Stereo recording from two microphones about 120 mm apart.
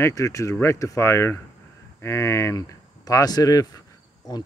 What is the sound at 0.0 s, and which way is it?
Speech, 25° left (ahead or behind).